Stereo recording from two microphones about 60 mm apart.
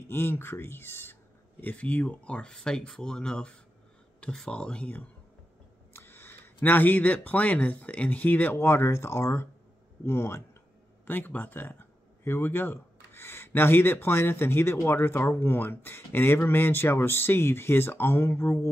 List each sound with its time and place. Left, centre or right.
0.1 s speech: left
1.6 s speech: left
5.9 s speech: left
11.1 s speech: left